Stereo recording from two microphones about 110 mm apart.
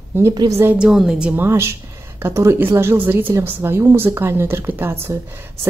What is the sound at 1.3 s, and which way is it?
A woman's voice, 20° right (ahead or behind).